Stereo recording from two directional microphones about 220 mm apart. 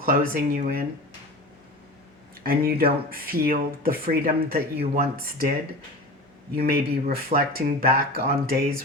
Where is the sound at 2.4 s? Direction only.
45° right (ahead or behind).